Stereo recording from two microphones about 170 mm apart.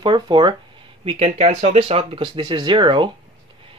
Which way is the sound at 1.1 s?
35° right (ahead or behind).